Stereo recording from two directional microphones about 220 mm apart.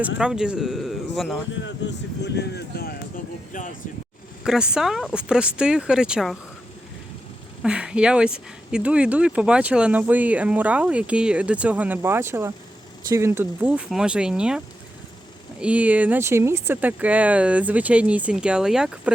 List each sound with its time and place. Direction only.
0.2 s speech: 5° right (ahead or behind)
1.5 s speech: 55° left (ahead or behind)
4.4 s speech: 5° right (ahead or behind)
7.6 s speech: 5° right (ahead or behind)
15.6 s speech: 5° right (ahead or behind)